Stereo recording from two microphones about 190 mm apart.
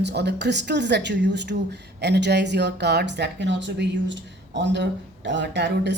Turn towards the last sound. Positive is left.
turn(degrees=-65)  # may be behind; listen again after turning